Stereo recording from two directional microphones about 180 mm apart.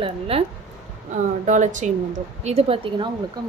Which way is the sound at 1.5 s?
45° right (ahead or behind).